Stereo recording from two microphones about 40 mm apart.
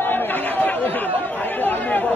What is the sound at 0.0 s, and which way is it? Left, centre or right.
Chatter, left.